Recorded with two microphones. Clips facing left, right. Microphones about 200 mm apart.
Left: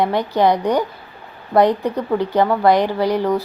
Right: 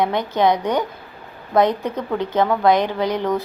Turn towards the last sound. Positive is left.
turn(degrees=15)  # may be behind; listen again after turning